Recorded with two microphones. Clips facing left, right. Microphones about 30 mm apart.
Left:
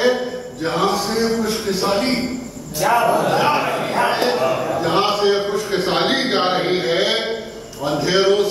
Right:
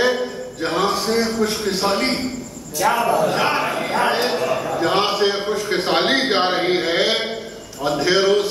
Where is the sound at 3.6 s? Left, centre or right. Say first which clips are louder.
Left 1 dB; centre.